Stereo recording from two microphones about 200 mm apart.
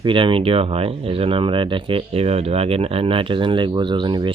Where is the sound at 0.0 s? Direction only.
25° right (ahead or behind).